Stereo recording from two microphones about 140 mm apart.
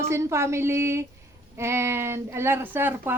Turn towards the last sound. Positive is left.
turn(degrees=-15)  # may be behind; listen again after turning